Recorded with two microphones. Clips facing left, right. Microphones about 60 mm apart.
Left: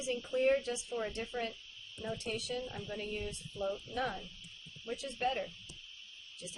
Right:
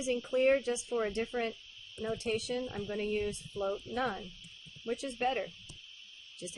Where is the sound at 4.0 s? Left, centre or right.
Right.